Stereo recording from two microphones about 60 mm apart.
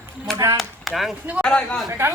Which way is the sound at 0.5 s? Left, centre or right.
Centre.